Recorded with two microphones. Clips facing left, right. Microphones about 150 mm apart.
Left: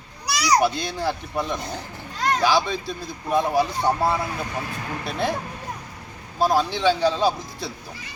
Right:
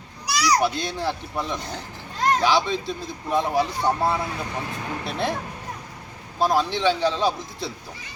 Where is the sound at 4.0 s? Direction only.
Centre (ahead or behind).